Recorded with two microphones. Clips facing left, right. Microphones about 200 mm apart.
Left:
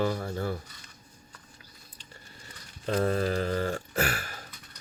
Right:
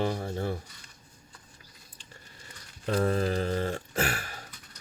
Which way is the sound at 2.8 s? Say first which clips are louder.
Even; 35° left (ahead or behind).